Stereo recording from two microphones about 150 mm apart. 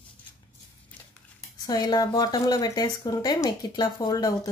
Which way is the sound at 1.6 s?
25° left (ahead or behind).